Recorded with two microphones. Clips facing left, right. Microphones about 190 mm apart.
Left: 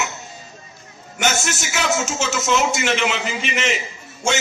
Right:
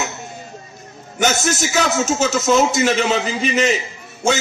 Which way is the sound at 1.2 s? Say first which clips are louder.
Right 4 dB; 35° right (ahead or behind).